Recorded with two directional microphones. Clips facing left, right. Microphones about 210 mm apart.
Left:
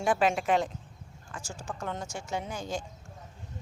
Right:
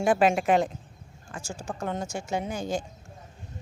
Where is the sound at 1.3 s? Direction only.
30° right (ahead or behind).